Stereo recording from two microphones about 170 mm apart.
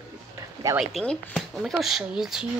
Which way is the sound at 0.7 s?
Centre (ahead or behind).